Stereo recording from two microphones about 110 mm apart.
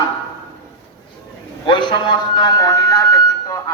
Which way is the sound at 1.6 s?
50° left (ahead or behind).